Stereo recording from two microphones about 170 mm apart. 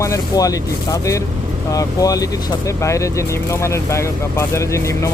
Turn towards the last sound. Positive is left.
turn(degrees=15)  # may be behind; listen again after turning